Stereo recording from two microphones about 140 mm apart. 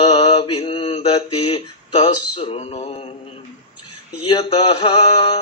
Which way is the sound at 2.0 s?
45° left (ahead or behind).